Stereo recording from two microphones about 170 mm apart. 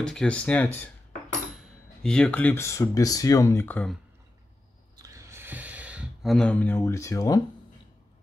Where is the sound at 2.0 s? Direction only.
5° left (ahead or behind).